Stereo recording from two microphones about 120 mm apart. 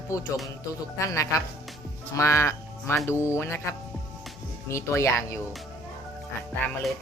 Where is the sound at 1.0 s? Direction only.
25° left (ahead or behind).